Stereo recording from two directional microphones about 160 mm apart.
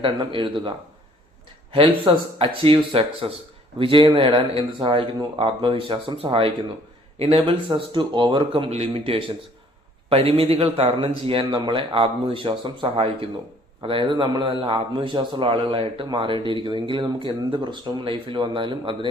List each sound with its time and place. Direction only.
0.0 s a man's voice: 30° right (ahead or behind)
1.7 s a man's voice: 35° right (ahead or behind)